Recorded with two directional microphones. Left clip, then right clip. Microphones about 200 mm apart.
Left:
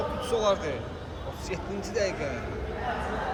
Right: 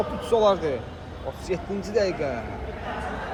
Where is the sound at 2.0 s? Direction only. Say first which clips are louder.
Right 5 dB; 15° right (ahead or behind).